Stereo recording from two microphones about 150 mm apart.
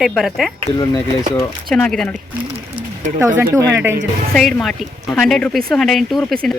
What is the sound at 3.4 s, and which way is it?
Speech, 15° right (ahead or behind).